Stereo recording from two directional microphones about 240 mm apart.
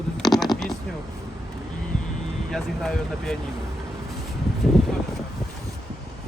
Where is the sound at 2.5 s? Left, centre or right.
Centre.